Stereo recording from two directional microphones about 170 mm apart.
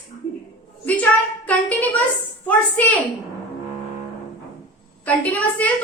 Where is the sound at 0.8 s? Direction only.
10° left (ahead or behind).